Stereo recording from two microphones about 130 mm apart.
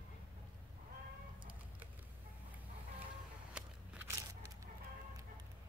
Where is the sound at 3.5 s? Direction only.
15° right (ahead or behind).